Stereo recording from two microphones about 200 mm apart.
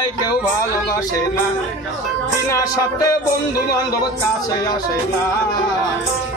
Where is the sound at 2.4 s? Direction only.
15° left (ahead or behind).